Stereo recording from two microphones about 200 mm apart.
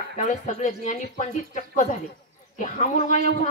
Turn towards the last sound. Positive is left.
turn(degrees=35)  # may be behind; listen again after turning